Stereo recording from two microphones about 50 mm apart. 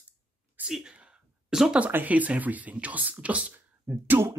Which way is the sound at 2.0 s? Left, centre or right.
Right.